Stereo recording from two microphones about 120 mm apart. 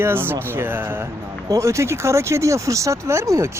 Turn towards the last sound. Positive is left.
turn(degrees=-25)  # may be behind; listen again after turning